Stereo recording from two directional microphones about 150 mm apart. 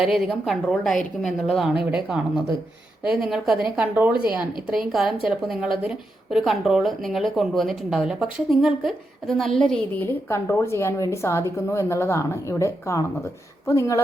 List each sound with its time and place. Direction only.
0.0 s a woman's voice: centre (ahead or behind)
3.0 s a woman's voice: centre (ahead or behind)
6.3 s speech: centre (ahead or behind); by 14.0 s 20° left (ahead or behind)